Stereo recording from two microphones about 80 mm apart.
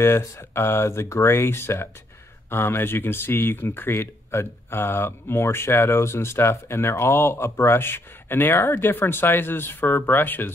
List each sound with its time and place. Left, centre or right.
0.0 s speech: left